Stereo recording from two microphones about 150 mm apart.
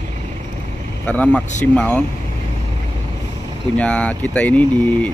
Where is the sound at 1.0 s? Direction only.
10° left (ahead or behind).